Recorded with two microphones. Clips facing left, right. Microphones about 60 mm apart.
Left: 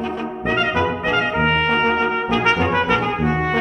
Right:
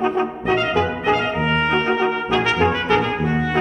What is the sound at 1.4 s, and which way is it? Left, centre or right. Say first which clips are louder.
Trumpet: left 2 dB; left.